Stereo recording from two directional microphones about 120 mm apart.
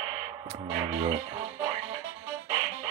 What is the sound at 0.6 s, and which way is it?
Music, 60° right (ahead or behind).